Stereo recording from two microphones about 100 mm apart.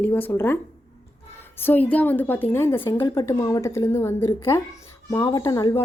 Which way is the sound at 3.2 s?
35° left (ahead or behind).